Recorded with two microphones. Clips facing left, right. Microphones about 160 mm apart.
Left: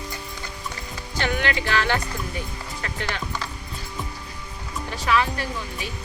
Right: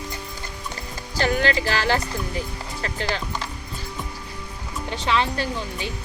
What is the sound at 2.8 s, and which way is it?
Speech, 30° right (ahead or behind).